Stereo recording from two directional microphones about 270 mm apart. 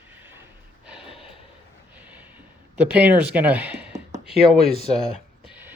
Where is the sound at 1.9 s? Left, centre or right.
Centre.